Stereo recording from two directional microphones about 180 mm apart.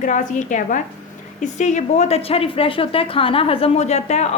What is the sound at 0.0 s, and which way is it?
A woman's voice, 45° left (ahead or behind).